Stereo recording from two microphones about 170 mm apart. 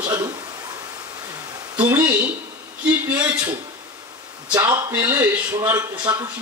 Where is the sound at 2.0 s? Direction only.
10° right (ahead or behind).